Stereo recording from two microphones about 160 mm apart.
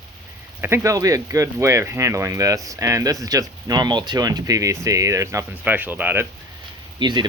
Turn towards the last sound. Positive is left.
turn(degrees=-30)  # may be behind; listen again after turning